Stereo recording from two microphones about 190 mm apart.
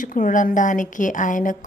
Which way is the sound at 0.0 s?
45° left (ahead or behind).